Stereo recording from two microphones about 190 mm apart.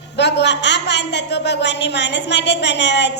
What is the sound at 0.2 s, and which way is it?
A woman's voice, 65° left (ahead or behind).